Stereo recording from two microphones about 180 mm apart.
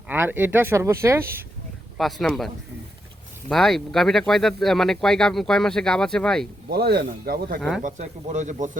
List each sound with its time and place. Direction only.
0.1 s speech: 10° right (ahead or behind)
2.0 s speech: centre (ahead or behind)
3.5 s speech: centre (ahead or behind)
6.7 s speech: 60° right (ahead or behind)
7.8 s speech: 45° right (ahead or behind)